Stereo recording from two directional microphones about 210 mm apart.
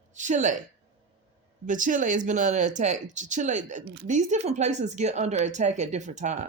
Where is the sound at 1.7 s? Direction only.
40° right (ahead or behind).